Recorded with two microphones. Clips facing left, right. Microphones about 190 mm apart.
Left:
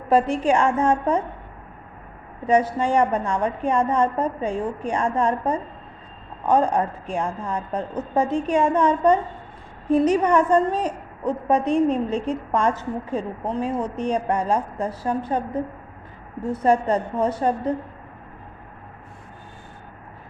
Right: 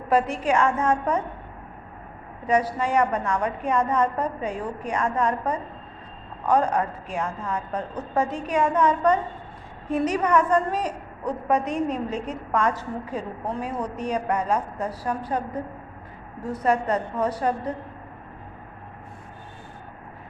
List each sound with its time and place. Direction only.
0.1 s a woman's voice: 30° left (ahead or behind)
2.5 s a woman's voice: 25° left (ahead or behind)